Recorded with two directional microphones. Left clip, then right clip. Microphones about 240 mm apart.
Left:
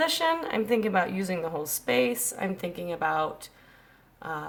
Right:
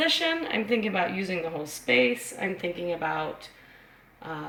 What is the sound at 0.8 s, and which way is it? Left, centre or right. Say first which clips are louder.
A woman's voice: left 1 dB; centre.